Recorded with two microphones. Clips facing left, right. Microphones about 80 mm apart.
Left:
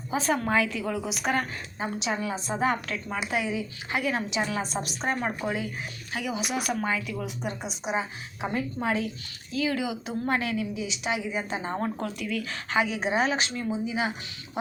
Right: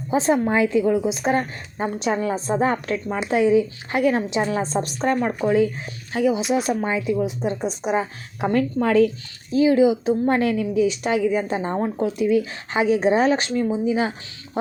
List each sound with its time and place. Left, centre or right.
0.1 s a woman's voice: right
1.8 s a woman's voice: right
6.1 s speech: right
7.6 s a woman's voice: right
9.5 s a woman's voice: right
11.8 s a woman's voice: right